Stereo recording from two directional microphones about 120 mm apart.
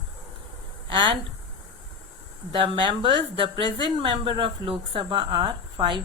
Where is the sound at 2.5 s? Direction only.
40° right (ahead or behind).